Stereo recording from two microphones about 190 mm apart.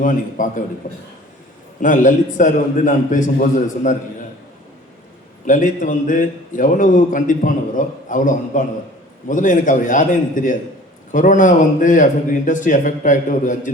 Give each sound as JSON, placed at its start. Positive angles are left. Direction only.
{"t": 0.0, "sound": "a man's voice", "side_deg": 45}
{"t": 5.5, "sound": "a man's voice", "side_deg": 40}